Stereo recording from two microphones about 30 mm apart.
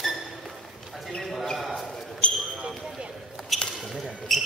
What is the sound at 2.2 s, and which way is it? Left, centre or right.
Basketball bounce, left.